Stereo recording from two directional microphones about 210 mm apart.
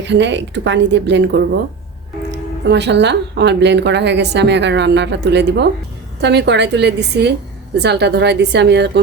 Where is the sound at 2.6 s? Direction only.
55° right (ahead or behind).